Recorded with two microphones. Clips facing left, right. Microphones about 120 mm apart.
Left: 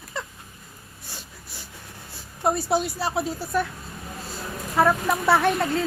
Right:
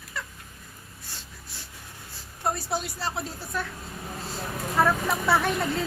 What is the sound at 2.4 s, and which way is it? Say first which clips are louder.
Speech: left 6 dB; 15° left (ahead or behind).